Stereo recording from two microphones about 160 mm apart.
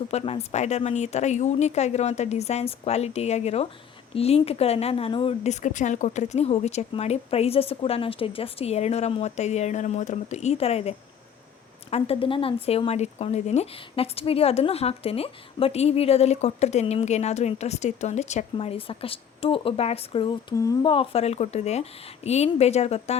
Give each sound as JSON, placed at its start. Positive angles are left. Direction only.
{"t": 0.1, "sound": "a woman's voice", "side_deg": 40}
{"t": 20.6, "sound": "speech", "side_deg": 20}
{"t": 20.9, "sound": "a woman's voice", "side_deg": 35}